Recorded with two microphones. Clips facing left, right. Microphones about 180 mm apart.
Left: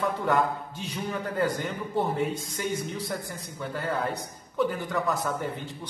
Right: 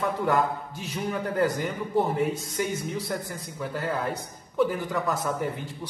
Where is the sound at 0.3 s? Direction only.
Centre (ahead or behind).